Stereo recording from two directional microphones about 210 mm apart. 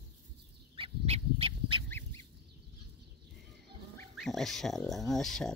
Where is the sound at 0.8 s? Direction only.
30° right (ahead or behind).